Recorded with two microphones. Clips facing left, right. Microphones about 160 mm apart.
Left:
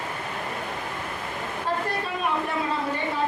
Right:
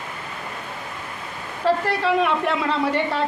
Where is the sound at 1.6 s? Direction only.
90° right.